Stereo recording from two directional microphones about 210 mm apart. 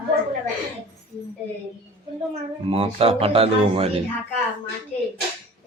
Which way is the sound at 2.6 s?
25° right (ahead or behind).